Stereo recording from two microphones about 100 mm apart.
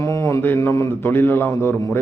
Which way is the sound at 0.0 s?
30° left (ahead or behind).